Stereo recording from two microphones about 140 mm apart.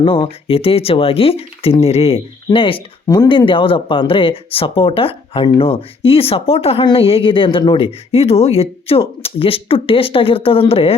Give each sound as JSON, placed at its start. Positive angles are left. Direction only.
{"t": 0.0, "sound": "speech", "side_deg": 40}